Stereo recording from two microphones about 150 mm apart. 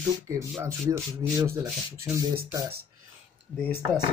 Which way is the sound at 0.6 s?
20° right (ahead or behind).